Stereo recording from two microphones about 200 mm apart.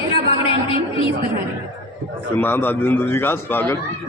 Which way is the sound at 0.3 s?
25° left (ahead or behind).